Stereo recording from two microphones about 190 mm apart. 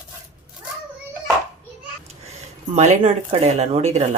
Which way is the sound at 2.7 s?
35° right (ahead or behind).